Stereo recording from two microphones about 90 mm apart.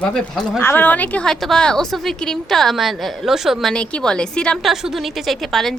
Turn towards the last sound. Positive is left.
turn(degrees=0)  # may be behind; listen again after turning